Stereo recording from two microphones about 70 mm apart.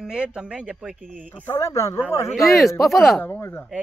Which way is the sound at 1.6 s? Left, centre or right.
Left.